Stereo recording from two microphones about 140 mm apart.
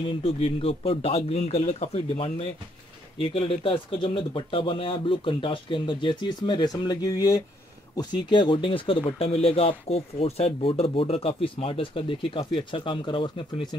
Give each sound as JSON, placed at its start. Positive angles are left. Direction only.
{"t": 0.0, "sound": "speech", "side_deg": 40}